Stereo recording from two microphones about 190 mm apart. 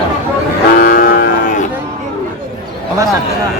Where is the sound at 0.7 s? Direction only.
50° left (ahead or behind).